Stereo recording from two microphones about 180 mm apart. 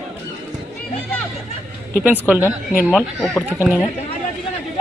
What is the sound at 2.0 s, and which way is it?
Speech, 10° right (ahead or behind).